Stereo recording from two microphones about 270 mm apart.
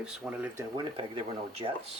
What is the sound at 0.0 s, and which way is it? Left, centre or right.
Speech, centre.